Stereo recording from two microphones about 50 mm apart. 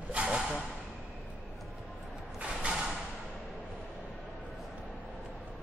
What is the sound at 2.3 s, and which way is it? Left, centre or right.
Mechanisms, centre.